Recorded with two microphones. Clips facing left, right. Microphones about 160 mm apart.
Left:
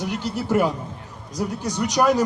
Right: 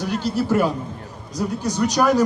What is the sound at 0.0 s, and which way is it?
A man's voice, 20° left (ahead or behind).